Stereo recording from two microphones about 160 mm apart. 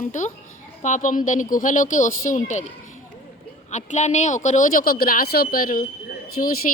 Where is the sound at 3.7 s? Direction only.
45° left (ahead or behind).